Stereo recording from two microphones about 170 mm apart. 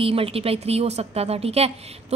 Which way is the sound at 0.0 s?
35° right (ahead or behind).